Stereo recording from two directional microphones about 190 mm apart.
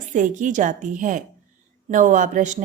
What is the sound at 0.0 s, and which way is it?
A woman's voice, 40° right (ahead or behind).